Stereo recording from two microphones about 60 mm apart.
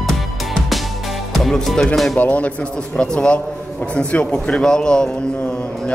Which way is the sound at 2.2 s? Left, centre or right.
Left.